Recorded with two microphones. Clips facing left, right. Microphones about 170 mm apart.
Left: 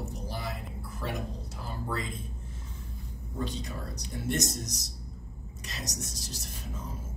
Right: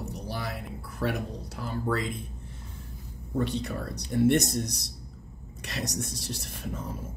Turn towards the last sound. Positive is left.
turn(degrees=-60)  # may be behind; listen again after turning